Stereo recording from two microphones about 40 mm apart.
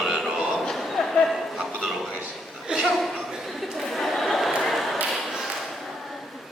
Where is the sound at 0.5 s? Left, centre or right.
Centre.